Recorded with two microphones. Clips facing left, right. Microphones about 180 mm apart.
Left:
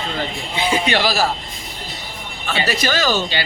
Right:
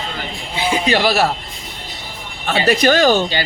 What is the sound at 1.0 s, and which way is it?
Speech, 60° right (ahead or behind).